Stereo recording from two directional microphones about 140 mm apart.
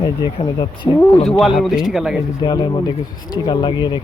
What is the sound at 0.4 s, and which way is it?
Speech, 40° left (ahead or behind).